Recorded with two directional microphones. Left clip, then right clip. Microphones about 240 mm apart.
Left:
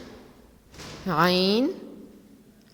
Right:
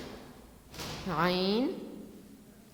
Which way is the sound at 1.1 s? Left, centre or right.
Left.